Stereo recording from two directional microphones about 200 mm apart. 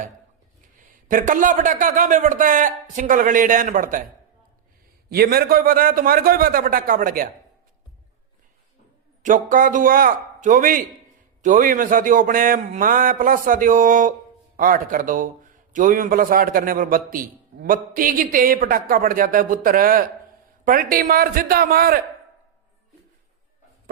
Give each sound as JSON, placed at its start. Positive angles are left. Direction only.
{"t": 1.0, "sound": "a man's voice", "side_deg": -40}
{"t": 5.0, "sound": "a man's voice", "side_deg": -50}
{"t": 9.2, "sound": "a man's voice", "side_deg": -40}